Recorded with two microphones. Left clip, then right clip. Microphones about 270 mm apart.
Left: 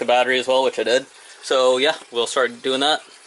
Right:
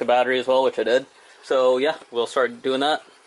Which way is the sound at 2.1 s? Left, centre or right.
Centre.